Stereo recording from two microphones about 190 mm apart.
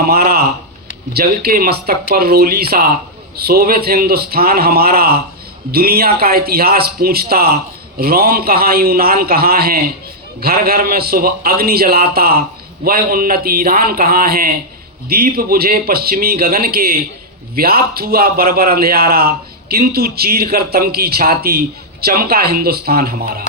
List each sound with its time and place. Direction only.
0.0 s a man's voice: 55° right (ahead or behind)